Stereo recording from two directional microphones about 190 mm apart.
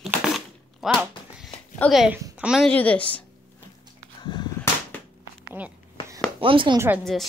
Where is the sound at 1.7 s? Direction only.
5° left (ahead or behind).